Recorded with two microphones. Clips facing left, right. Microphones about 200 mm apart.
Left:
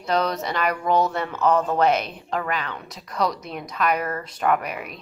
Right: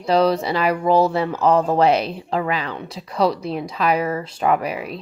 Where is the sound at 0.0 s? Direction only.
30° right (ahead or behind).